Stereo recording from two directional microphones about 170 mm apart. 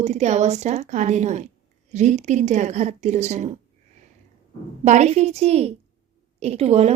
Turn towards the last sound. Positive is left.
turn(degrees=-40)  # may be behind; listen again after turning